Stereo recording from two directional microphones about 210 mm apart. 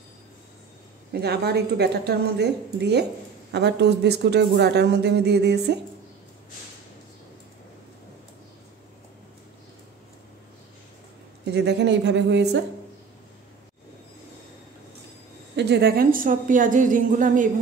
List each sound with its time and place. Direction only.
1.1 s speech: 50° right (ahead or behind)
11.4 s a woman's voice: 50° right (ahead or behind)
15.5 s a woman's voice: 50° right (ahead or behind)